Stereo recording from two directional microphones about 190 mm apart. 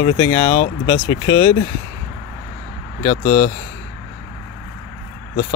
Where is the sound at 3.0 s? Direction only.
35° left (ahead or behind).